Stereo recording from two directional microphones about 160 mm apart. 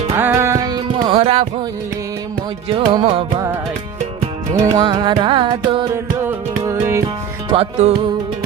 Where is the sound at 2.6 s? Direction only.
35° right (ahead or behind).